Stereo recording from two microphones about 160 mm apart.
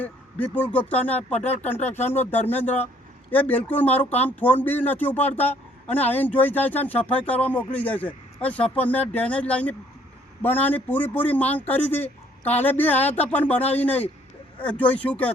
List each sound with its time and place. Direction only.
0.0 s speech: 10° left (ahead or behind)
1.8 s speech: 45° left (ahead or behind)
2.0 s speech: 10° left (ahead or behind)